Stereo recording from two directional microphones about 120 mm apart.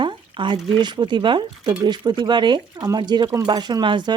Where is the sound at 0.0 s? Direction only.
40° right (ahead or behind).